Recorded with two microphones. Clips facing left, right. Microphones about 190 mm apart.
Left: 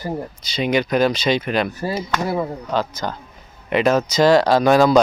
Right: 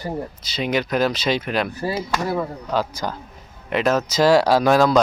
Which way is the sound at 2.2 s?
5° left (ahead or behind).